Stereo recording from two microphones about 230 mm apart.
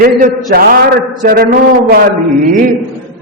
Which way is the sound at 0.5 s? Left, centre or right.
Right.